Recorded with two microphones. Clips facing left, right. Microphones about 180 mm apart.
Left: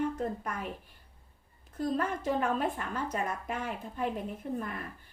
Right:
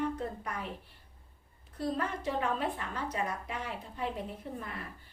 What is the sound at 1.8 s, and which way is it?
A woman's voice, 45° left (ahead or behind).